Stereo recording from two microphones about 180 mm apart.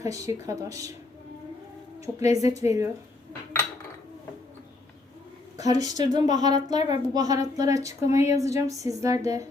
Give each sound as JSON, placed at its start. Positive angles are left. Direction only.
{"t": 0.0, "sound": "speech", "side_deg": -20}
{"t": 2.0, "sound": "a woman's voice", "side_deg": -20}
{"t": 5.5, "sound": "a woman's voice", "side_deg": -20}